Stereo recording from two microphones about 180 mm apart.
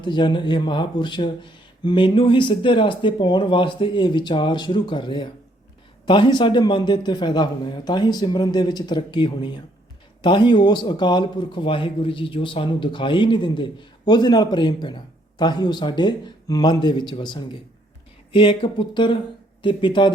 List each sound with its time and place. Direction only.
0.0 s a man's voice: 25° left (ahead or behind)